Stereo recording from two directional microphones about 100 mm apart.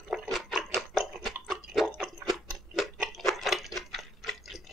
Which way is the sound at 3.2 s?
Centre (ahead or behind).